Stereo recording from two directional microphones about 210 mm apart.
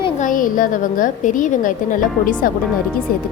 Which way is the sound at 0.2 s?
40° left (ahead or behind).